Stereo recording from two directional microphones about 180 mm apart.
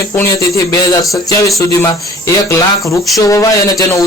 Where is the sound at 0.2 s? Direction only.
15° left (ahead or behind).